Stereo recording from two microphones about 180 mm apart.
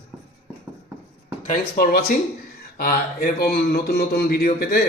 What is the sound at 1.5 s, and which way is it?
A man's voice, 55° left (ahead or behind).